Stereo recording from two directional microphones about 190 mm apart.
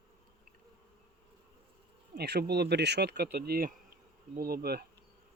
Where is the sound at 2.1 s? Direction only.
60° right (ahead or behind).